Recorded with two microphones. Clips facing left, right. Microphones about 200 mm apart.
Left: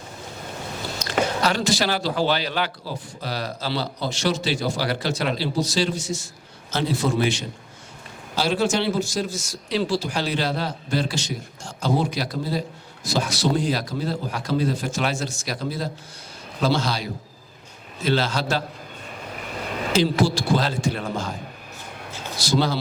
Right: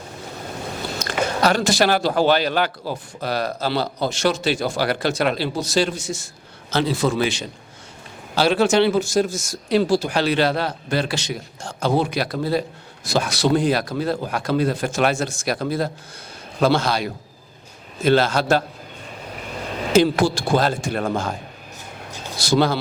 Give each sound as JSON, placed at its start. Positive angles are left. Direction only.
{"t": 0.9, "sound": "a man's voice", "side_deg": -50}
{"t": 6.7, "sound": "a man's voice", "side_deg": -90}
{"t": 8.4, "sound": "a man's voice", "side_deg": -65}
{"t": 19.9, "sound": "a man's voice", "side_deg": -50}
{"t": 22.4, "sound": "speech", "side_deg": -55}